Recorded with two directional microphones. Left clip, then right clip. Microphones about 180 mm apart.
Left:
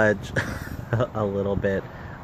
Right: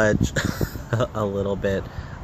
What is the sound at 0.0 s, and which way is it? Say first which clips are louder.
Speech: right 1 dB; centre (ahead or behind).